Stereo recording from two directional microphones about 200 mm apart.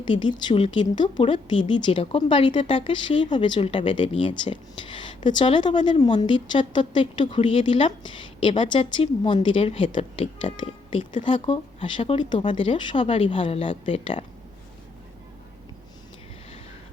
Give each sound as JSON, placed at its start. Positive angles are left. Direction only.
{"t": 0.0, "sound": "speech", "side_deg": 25}